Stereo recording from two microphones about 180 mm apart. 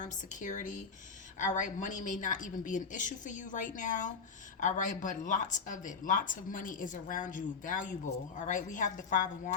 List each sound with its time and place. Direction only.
0.0 s speech: 45° left (ahead or behind)